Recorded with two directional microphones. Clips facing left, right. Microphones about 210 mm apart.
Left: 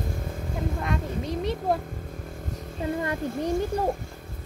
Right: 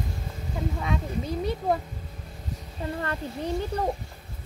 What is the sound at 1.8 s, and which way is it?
Vehicle, 50° left (ahead or behind).